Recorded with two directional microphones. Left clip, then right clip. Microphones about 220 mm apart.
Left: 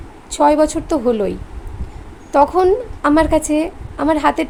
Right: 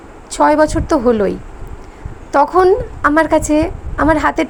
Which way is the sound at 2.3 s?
10° right (ahead or behind).